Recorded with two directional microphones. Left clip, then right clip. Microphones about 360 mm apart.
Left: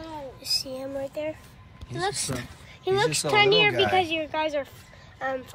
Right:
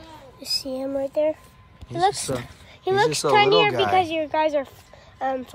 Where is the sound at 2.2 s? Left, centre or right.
Right.